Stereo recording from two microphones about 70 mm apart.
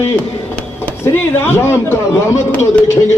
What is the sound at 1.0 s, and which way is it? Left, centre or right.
Speech, left.